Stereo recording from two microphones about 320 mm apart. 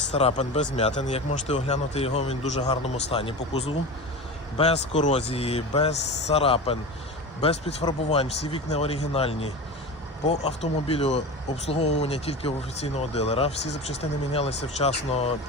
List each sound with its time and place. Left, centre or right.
0.1 s speech: centre